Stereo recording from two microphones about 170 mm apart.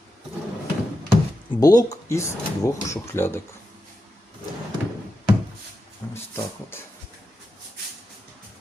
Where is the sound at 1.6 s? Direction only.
20° left (ahead or behind).